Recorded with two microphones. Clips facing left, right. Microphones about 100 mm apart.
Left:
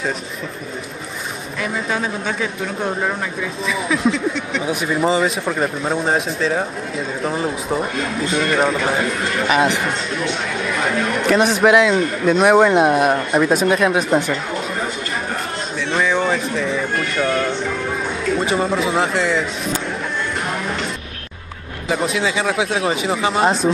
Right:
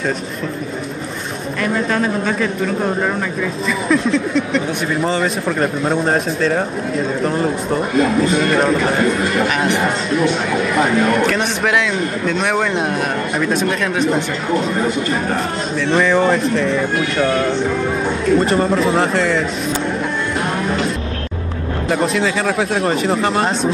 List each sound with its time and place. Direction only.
1.6 s speech: centre (ahead or behind)
11.6 s a man's voice: 15° left (ahead or behind)
13.5 s a man's voice: 10° left (ahead or behind)
15.9 s speech: centre (ahead or behind)
21.8 s speech: centre (ahead or behind)